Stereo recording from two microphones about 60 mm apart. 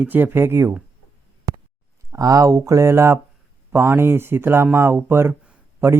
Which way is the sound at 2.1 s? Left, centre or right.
Right.